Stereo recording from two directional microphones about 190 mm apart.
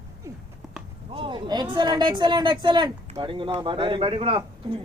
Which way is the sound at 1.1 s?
25° right (ahead or behind).